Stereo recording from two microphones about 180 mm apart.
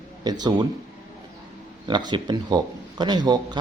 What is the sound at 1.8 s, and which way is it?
Speech, 25° right (ahead or behind).